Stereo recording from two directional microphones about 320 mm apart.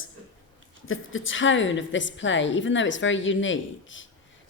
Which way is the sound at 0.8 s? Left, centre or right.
Left.